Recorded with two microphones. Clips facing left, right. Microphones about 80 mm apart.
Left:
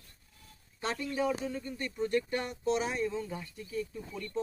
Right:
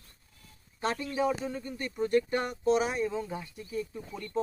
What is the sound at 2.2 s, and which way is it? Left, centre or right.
Speech, right.